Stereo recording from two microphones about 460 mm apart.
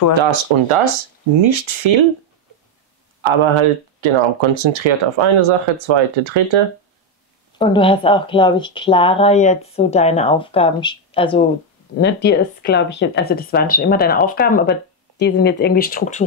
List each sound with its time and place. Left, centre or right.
0.1 s speech: right
3.2 s speech: right
7.5 s speech: centre
12.0 s speech: left